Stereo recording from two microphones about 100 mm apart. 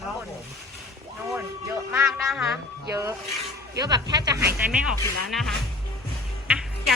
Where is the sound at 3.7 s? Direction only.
40° right (ahead or behind).